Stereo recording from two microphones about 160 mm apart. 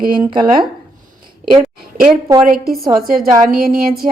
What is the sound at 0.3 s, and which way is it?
Speech, 30° right (ahead or behind).